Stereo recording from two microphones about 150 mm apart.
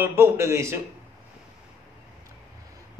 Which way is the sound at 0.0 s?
15° right (ahead or behind).